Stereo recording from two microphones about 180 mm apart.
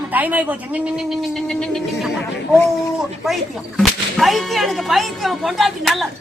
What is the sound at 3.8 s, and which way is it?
Whip, centre (ahead or behind).